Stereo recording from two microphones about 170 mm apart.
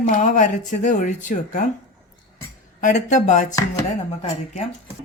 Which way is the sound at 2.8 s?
50° left (ahead or behind).